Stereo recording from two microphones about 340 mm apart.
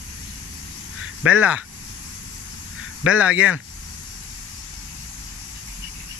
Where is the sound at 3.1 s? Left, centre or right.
Centre.